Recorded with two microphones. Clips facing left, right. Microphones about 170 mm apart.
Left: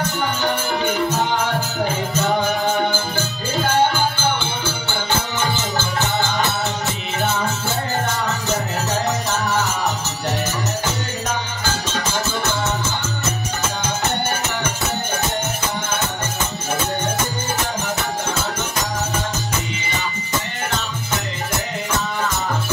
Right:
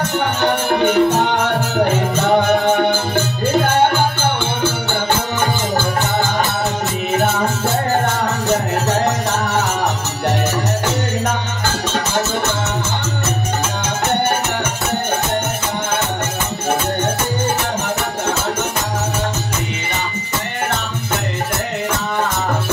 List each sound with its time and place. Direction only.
0.2 s music: 60° right (ahead or behind)
3.5 s music: 55° right (ahead or behind)